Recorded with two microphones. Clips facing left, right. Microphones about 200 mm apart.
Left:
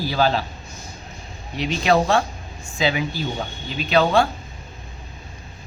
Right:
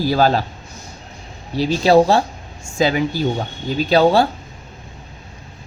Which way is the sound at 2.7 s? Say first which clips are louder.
Right 5 dB; 45° right (ahead or behind).